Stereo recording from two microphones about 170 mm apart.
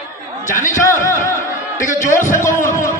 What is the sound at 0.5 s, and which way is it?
Speech, 50° left (ahead or behind).